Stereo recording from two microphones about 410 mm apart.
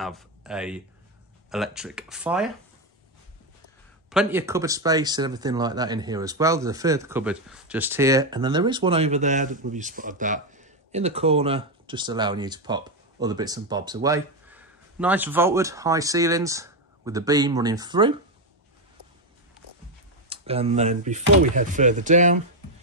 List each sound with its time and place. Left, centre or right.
0.0 s speech: centre
4.1 s speech: centre
20.2 s speech: centre